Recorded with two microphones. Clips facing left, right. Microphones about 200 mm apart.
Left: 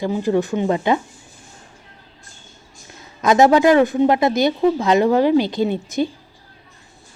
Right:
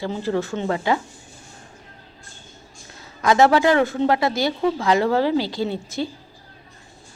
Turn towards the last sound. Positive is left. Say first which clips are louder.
# left 5 dB
turn(degrees=20)  # may be behind; listen again after turning